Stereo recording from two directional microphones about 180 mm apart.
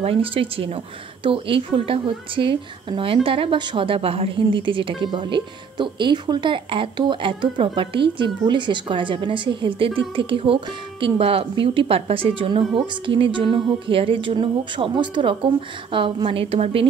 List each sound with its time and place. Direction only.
0.0 s speech: 30° right (ahead or behind)